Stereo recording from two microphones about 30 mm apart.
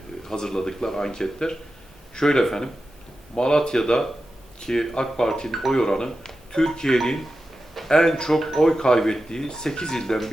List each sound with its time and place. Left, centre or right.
0.3 s speech: centre
5.5 s speech: centre
5.7 s speech: left
7.9 s speech: left